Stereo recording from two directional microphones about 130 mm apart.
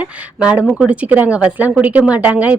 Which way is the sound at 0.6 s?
Centre (ahead or behind).